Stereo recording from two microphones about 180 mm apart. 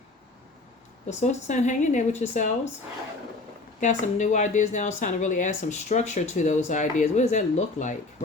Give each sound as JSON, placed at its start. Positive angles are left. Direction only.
{"t": 1.2, "sound": "speech", "side_deg": 40}
{"t": 3.8, "sound": "speech", "side_deg": 40}